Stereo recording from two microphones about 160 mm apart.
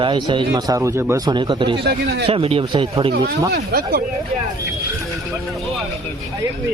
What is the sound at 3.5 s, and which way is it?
Speech, 75° right (ahead or behind).